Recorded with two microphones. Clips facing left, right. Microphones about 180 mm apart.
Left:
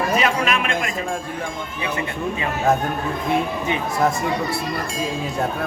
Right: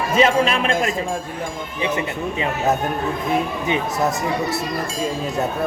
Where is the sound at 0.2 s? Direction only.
30° right (ahead or behind).